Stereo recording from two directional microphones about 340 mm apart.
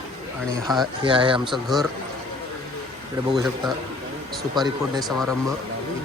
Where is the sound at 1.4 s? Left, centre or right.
Centre.